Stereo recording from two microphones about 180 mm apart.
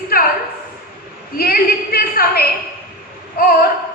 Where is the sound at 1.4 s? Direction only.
55° left (ahead or behind).